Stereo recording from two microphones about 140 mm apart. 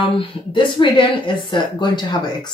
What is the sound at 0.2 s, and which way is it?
Speech, 35° left (ahead or behind).